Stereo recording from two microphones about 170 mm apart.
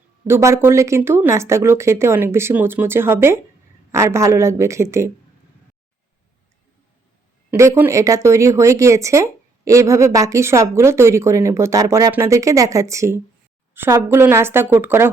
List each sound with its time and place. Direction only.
0.3 s speech: 15° right (ahead or behind)
7.5 s speech: 15° right (ahead or behind)